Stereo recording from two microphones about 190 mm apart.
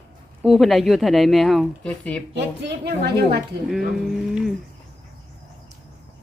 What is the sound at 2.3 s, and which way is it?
A woman's voice, 60° right (ahead or behind).